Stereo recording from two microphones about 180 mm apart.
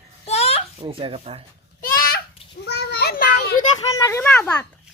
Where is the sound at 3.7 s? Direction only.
20° left (ahead or behind).